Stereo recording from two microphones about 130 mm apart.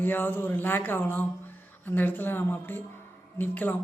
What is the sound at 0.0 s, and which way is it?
A woman's voice, 15° left (ahead or behind).